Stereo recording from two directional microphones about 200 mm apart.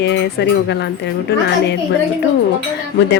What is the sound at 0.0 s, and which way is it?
Speech, 60° left (ahead or behind).